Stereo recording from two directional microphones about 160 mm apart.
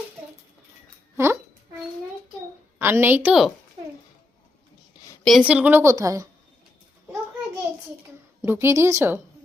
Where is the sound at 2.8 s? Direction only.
15° right (ahead or behind).